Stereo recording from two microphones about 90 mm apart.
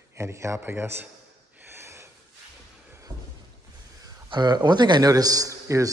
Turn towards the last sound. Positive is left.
turn(degrees=-35)  # may be behind; listen again after turning